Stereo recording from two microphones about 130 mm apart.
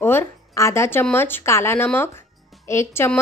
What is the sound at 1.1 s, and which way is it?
A woman's voice, 15° left (ahead or behind).